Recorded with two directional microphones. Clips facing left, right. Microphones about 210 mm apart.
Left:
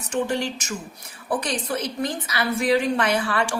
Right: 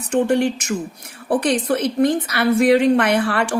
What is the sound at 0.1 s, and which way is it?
A woman's voice, 60° right (ahead or behind).